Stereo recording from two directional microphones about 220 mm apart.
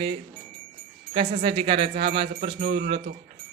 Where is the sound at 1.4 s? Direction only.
20° right (ahead or behind).